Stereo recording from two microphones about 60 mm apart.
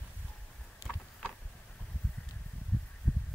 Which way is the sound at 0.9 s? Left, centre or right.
Centre.